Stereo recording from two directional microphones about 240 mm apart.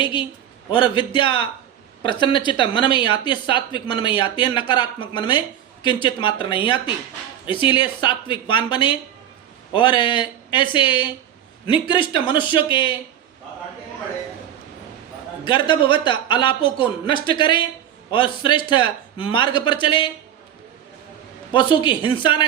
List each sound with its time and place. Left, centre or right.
0.0 s speech: centre
15.4 s speech: centre
21.5 s speech: centre